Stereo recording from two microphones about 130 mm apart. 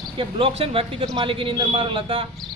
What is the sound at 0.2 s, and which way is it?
A man's voice, 40° right (ahead or behind).